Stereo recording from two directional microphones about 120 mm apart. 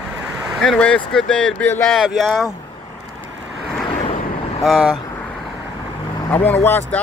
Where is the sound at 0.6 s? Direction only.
5° left (ahead or behind).